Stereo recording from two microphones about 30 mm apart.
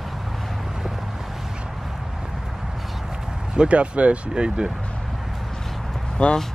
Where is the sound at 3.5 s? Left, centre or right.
Right.